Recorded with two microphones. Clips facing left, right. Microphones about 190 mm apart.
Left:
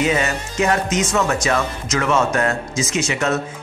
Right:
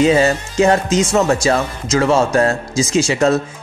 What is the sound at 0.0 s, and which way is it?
Speech, 30° right (ahead or behind).